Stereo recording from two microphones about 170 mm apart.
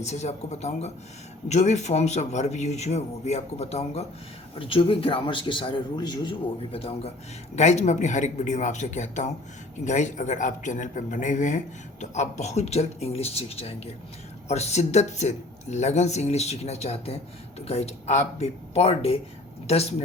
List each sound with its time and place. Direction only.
0.0 s speech: 40° left (ahead or behind); by 6.3 s 25° left (ahead or behind)
6.7 s speech: 35° left (ahead or behind)